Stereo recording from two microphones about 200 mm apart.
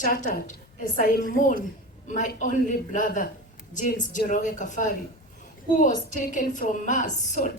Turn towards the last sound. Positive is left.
turn(degrees=40)  # may be behind; listen again after turning